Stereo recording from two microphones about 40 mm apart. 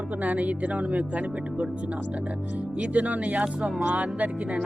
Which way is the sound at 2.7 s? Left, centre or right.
Right.